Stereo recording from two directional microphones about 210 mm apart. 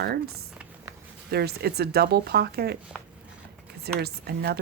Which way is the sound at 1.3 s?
50° right (ahead or behind).